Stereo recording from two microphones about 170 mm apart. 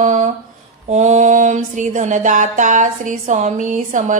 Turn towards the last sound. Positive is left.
turn(degrees=-50)  # may be behind; listen again after turning